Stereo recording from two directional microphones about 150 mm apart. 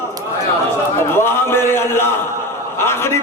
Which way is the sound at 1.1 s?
15° left (ahead or behind).